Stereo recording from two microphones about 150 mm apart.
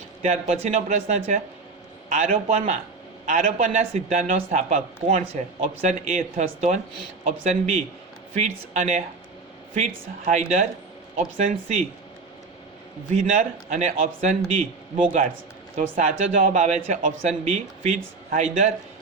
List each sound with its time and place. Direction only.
0.2 s a man's voice: 45° right (ahead or behind)
10.2 s a man's voice: 50° right (ahead or behind)
13.1 s a man's voice: 50° right (ahead or behind)